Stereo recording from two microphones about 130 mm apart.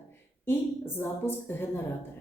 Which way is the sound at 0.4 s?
20° left (ahead or behind).